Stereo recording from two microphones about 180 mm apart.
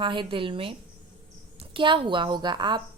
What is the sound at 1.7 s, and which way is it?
A woman's voice, 25° right (ahead or behind).